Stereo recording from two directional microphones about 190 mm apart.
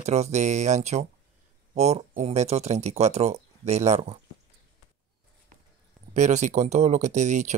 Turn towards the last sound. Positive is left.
turn(degrees=-40)  # may be behind; listen again after turning